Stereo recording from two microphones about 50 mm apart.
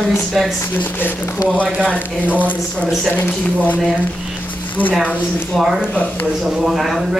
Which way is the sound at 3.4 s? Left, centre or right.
Left.